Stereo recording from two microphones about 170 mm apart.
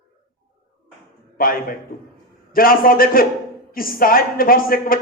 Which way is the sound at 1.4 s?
60° left (ahead or behind).